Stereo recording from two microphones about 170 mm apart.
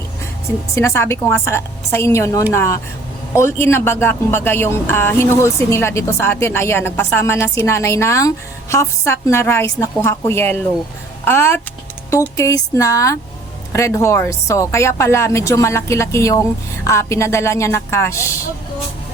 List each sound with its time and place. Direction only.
0.8 s speech: 15° left (ahead or behind)